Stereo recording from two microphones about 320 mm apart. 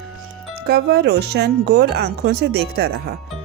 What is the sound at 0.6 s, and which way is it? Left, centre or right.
Speech, right.